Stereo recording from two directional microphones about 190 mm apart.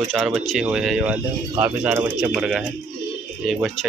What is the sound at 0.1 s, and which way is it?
Speech, centre (ahead or behind).